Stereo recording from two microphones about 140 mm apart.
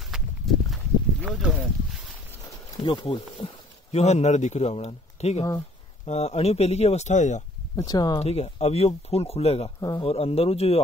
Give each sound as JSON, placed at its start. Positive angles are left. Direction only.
{"t": 0.0, "sound": "walk", "side_deg": 0}
{"t": 1.2, "sound": "a sound", "side_deg": -10}
{"t": 2.4, "sound": "a sound", "side_deg": 30}
{"t": 3.4, "sound": "speech", "side_deg": 40}
{"t": 3.9, "sound": "a man's voice", "side_deg": 50}
{"t": 7.7, "sound": "speech", "side_deg": 25}
{"t": 8.2, "sound": "a man's voice", "side_deg": 50}
{"t": 9.8, "sound": "speech", "side_deg": 25}
{"t": 10.0, "sound": "a man's voice", "side_deg": 45}